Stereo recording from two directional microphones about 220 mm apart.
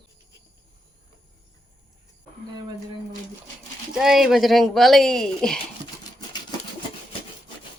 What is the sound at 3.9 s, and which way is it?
Speech, centre (ahead or behind).